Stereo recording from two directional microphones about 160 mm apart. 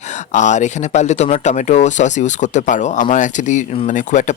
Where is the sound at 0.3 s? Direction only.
50° left (ahead or behind).